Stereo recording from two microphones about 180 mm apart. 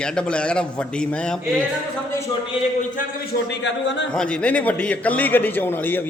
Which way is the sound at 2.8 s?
50° left (ahead or behind).